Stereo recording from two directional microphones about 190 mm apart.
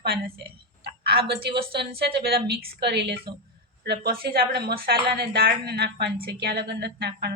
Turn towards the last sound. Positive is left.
turn(degrees=-55)  # may be behind; listen again after turning